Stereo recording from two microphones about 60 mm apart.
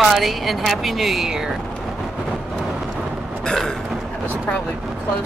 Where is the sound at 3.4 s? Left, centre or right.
Centre.